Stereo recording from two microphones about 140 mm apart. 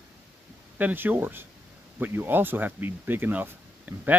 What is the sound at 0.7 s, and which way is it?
Speech, 15° right (ahead or behind).